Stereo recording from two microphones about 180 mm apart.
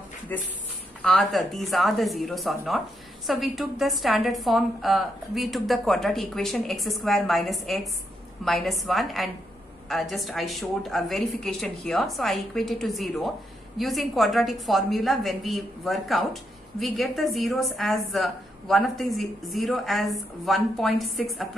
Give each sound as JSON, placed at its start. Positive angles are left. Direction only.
{"t": 0.3, "sound": "a woman's voice", "side_deg": 10}